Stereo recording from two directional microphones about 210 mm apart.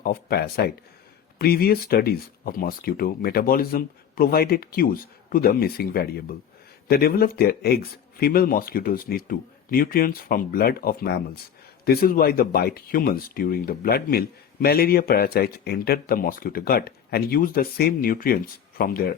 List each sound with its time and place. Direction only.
0.0 s speech: 45° left (ahead or behind)